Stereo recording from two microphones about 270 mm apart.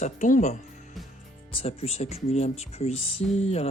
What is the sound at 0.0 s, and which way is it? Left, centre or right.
Speech, left.